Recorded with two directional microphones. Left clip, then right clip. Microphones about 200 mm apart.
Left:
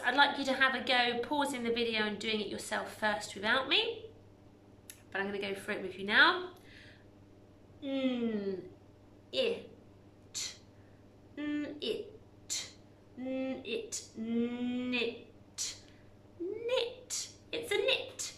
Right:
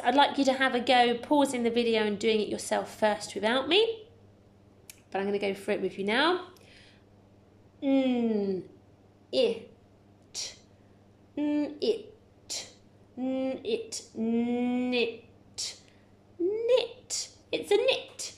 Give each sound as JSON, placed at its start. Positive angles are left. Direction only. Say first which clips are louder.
{"t": 0.0, "sound": "a woman's voice", "louder": "right 5 dB", "side_deg": -30}
{"t": 4.8, "sound": "a woman's voice", "louder": "right 5 dB", "side_deg": -25}
{"t": 11.3, "sound": "a woman's voice", "louder": "right 8 dB", "side_deg": -25}
{"t": 16.6, "sound": "a sound", "louder": "right 6 dB", "side_deg": -30}